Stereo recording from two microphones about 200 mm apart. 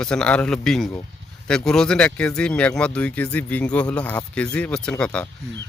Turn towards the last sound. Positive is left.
turn(degrees=5)  # may be behind; listen again after turning